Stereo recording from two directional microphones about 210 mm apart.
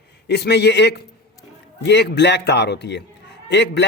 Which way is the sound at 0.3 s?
50° left (ahead or behind).